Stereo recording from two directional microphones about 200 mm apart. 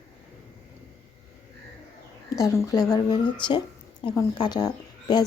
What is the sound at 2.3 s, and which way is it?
A woman's voice, 15° left (ahead or behind).